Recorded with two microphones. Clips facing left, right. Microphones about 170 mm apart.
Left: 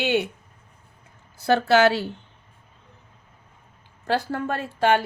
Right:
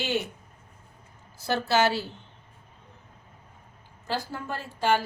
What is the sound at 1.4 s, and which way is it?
Speech, 60° left (ahead or behind).